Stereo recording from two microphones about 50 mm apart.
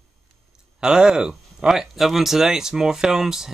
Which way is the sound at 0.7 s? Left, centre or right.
Centre.